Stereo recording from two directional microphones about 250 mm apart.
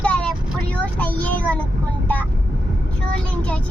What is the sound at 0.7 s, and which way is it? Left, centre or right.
Child singing, centre.